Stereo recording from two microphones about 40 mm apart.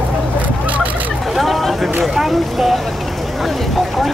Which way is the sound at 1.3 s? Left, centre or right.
Centre.